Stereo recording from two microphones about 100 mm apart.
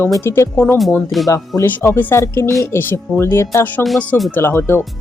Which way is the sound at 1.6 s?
20° left (ahead or behind).